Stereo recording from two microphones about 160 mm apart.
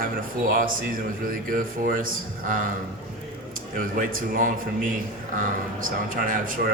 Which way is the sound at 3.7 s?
60° right (ahead or behind).